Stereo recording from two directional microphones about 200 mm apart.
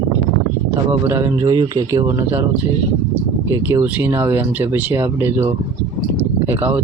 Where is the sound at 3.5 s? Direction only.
10° right (ahead or behind).